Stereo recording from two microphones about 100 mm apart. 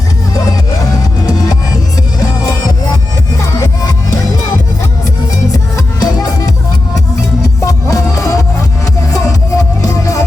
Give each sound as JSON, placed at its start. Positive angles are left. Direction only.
{"t": 0.3, "sound": "music", "side_deg": 35}
{"t": 5.7, "sound": "music", "side_deg": 35}